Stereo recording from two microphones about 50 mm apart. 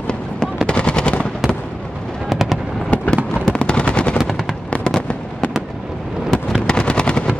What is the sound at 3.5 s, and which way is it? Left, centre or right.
Gunshot, centre.